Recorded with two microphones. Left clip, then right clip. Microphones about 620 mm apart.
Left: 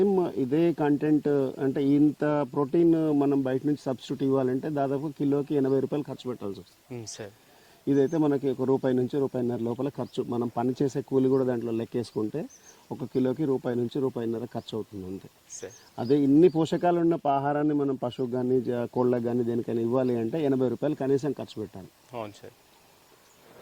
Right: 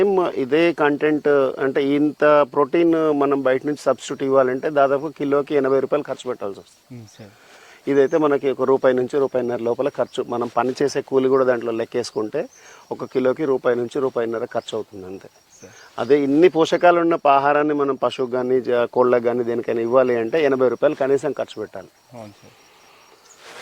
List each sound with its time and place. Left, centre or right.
0.0 s speech: centre
7.9 s speech: centre
16.2 s speech: centre
21.1 s speech: right